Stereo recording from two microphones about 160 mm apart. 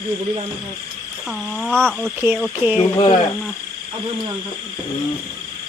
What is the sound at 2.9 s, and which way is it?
Speech, 35° left (ahead or behind).